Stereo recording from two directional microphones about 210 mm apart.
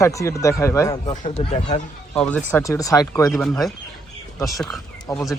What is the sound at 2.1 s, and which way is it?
Speech, 5° left (ahead or behind).